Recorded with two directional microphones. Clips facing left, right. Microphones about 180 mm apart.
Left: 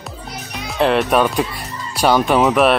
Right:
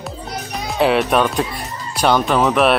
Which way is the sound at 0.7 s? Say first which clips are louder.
Even; centre (ahead or behind).